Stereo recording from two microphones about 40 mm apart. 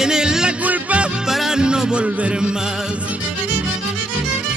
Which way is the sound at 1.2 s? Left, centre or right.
Centre.